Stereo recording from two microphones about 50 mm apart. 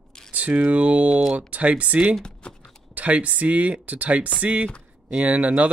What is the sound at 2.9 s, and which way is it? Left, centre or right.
Speech, right.